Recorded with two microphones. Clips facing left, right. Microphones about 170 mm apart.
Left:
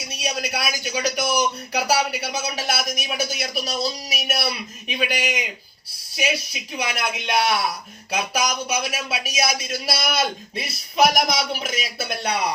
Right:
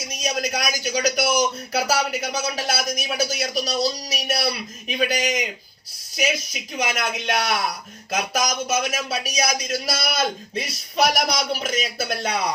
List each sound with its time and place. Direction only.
0.1 s speech: 40° right (ahead or behind)
6.5 s speech: 40° right (ahead or behind)